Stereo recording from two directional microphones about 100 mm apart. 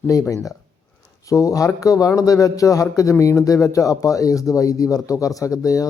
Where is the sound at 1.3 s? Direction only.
35° left (ahead or behind).